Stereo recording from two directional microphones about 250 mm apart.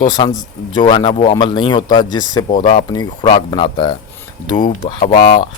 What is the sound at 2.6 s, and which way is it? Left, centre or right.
Speech, left.